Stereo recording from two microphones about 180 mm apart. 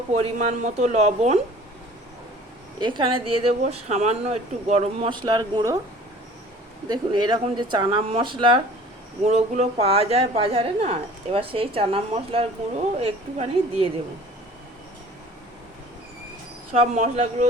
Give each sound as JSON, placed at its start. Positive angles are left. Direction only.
{"t": 0.1, "sound": "a woman's voice", "side_deg": -35}
{"t": 2.8, "sound": "a woman's voice", "side_deg": -30}
{"t": 6.8, "sound": "a woman's voice", "side_deg": -25}
{"t": 16.7, "sound": "a woman's voice", "side_deg": -40}